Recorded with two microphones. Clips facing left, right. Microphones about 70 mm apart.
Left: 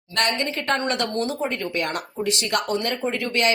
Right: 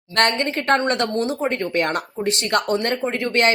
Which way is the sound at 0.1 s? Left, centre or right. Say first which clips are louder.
Right 4 dB; right.